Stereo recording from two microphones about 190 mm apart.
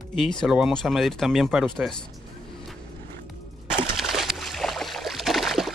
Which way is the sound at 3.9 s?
Centre (ahead or behind).